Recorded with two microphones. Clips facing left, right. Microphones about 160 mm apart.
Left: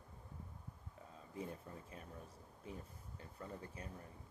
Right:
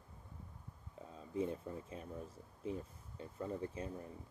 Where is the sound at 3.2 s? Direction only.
25° right (ahead or behind).